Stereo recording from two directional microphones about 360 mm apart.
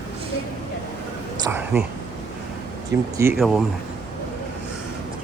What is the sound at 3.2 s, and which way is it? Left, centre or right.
Speech, centre.